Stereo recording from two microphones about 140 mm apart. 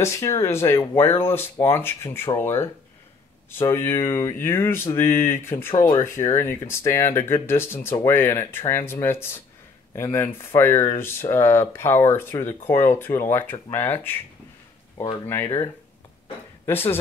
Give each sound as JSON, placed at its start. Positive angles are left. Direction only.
{"t": 0.0, "sound": "speech", "side_deg": 20}
{"t": 15.2, "sound": "speech", "side_deg": 15}